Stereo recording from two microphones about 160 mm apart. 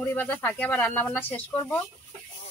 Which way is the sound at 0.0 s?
10° left (ahead or behind).